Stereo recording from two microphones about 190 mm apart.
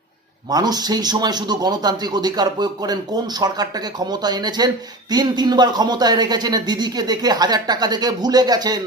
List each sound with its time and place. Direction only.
0.5 s speech: 20° right (ahead or behind)